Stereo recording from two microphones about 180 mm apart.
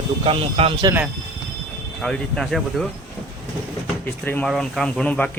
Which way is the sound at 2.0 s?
5° left (ahead or behind).